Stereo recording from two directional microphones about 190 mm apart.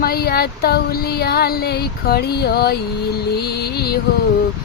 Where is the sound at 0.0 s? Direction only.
55° left (ahead or behind).